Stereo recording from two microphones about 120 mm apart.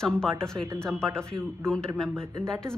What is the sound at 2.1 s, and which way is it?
Speech, 25° right (ahead or behind).